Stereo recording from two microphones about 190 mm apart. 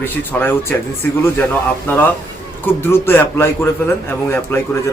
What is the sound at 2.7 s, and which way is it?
A man's voice, 10° left (ahead or behind).